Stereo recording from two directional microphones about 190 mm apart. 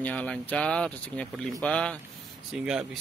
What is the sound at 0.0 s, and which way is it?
Speech, 5° left (ahead or behind).